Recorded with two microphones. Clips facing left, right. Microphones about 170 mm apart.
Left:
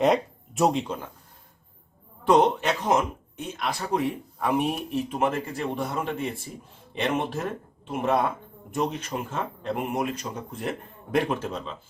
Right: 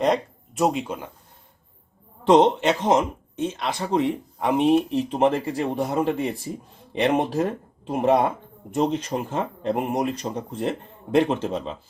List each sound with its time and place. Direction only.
0.0 s speech: centre (ahead or behind)
2.2 s speech: 25° right (ahead or behind)